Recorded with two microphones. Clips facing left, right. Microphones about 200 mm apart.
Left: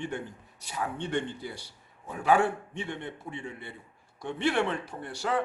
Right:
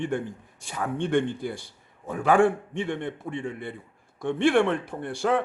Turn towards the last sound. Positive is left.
turn(degrees=-55)  # may be behind; listen again after turning